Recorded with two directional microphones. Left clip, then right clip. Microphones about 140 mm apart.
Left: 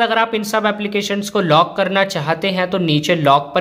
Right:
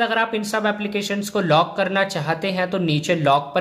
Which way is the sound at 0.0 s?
10° left (ahead or behind).